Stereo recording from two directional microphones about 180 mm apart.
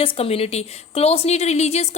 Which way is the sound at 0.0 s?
35° left (ahead or behind).